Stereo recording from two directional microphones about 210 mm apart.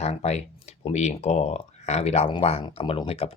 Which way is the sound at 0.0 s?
30° left (ahead or behind).